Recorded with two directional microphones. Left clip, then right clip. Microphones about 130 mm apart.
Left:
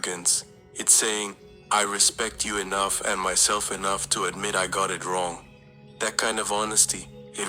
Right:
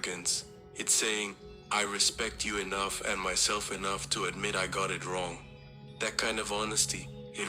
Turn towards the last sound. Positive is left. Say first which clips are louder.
# left 4 dB
turn(degrees=45)  # may be behind; listen again after turning